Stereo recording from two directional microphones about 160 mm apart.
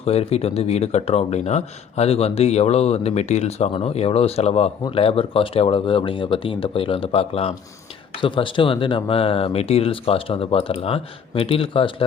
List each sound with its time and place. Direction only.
0.0 s speech: 40° left (ahead or behind)